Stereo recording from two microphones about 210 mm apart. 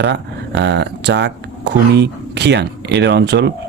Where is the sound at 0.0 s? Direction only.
55° right (ahead or behind).